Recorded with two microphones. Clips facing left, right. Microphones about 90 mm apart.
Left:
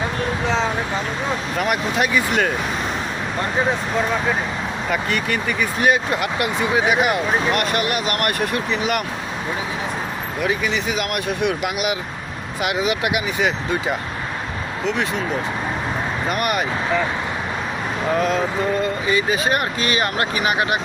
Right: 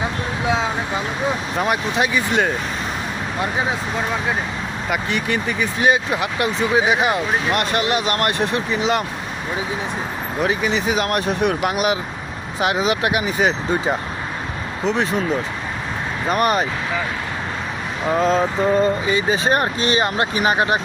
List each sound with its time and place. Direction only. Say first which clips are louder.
0.4 s speech: right 1 dB; 10° right (ahead or behind)
1.5 s speech: even; 25° right (ahead or behind)
4.9 s speech: right 1 dB; 20° right (ahead or behind)
10.4 s speech: right 2 dB; 30° right (ahead or behind)
16.3 s speech: right 5 dB; 30° right (ahead or behind)
18.2 s speech: right 5 dB; 30° right (ahead or behind)